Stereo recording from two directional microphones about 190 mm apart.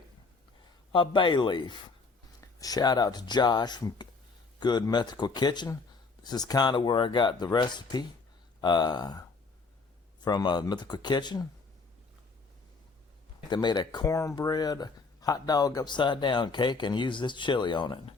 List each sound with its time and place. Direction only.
0.9 s speech: 25° left (ahead or behind)
10.2 s speech: 20° left (ahead or behind)
13.5 s speech: 25° left (ahead or behind)